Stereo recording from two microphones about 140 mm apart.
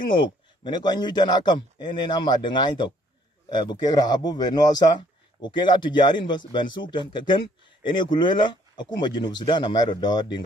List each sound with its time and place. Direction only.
0.1 s speech: 35° left (ahead or behind)